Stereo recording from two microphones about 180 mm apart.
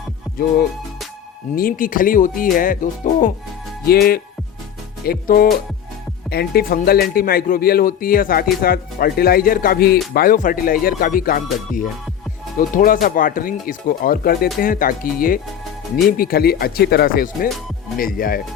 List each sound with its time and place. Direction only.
0.3 s music: centre (ahead or behind)
1.5 s speech: 50° left (ahead or behind)
3.8 s speech: 60° left (ahead or behind)
10.2 s speech: 50° left (ahead or behind)